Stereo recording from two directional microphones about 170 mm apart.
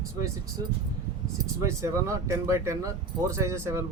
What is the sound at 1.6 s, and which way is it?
Speech, 20° right (ahead or behind).